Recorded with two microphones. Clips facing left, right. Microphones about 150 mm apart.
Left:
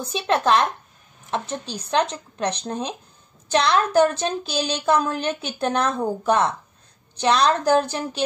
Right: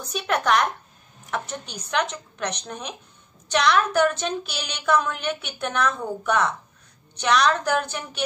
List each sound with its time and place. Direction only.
0.0 s speech: 30° left (ahead or behind)